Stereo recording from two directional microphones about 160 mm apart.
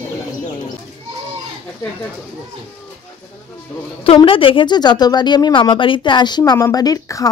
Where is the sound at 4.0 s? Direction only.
35° left (ahead or behind).